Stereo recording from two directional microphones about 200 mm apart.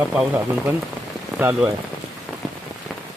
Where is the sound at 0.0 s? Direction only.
5° right (ahead or behind).